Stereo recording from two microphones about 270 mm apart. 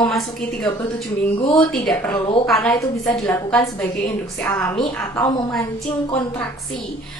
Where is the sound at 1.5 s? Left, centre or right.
Centre.